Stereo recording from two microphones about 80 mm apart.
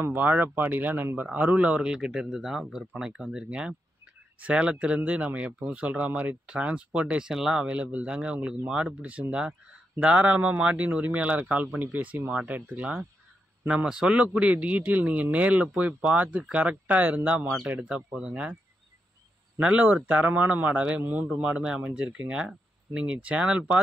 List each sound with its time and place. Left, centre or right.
0.0 s speech: right
19.6 s speech: centre